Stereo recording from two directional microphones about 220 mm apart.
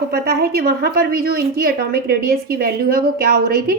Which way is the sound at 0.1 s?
45° right (ahead or behind).